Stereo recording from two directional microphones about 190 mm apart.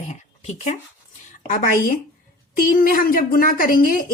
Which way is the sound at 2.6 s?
50° left (ahead or behind).